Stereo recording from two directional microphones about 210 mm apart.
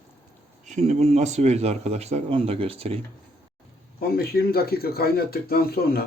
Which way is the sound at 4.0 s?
45° left (ahead or behind).